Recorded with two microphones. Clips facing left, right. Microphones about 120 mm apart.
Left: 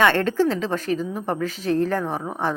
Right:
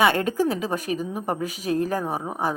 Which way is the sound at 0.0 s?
10° right (ahead or behind).